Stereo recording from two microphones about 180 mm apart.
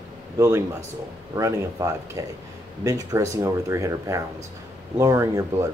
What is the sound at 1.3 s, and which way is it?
Speech, 15° right (ahead or behind).